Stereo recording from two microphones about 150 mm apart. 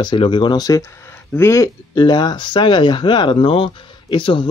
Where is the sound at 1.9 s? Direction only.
30° left (ahead or behind).